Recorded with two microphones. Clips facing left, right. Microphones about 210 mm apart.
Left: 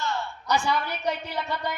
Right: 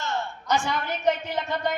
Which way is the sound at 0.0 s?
20° right (ahead or behind).